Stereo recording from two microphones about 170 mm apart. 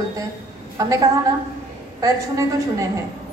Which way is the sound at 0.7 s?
20° right (ahead or behind).